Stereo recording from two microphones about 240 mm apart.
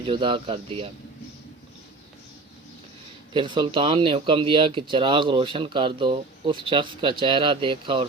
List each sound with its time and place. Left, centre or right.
0.0 s speech: right
3.3 s speech: centre